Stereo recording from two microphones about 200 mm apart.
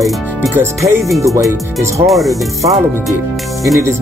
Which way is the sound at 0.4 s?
15° right (ahead or behind).